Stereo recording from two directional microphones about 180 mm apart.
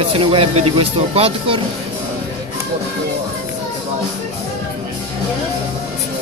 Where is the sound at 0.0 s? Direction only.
30° right (ahead or behind).